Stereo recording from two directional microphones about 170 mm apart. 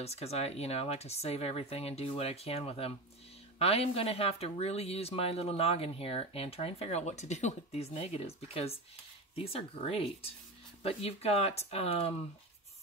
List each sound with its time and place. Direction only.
0.0 s speech: 40° left (ahead or behind)